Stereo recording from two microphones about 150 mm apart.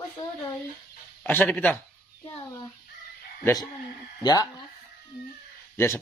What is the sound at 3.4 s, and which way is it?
Speech, 20° left (ahead or behind).